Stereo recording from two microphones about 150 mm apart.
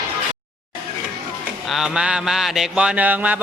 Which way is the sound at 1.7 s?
5° right (ahead or behind).